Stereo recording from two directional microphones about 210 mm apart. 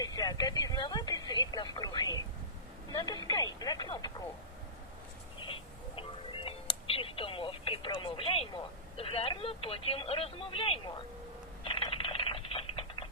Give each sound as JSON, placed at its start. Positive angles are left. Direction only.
{"t": 0.0, "sound": "telephone", "side_deg": 15}
{"t": 2.9, "sound": "speech", "side_deg": 20}
{"t": 6.0, "sound": "speech", "side_deg": 25}
{"t": 11.6, "sound": "typing", "side_deg": 25}